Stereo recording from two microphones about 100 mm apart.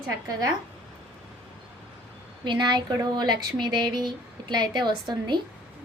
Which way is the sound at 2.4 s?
50° right (ahead or behind).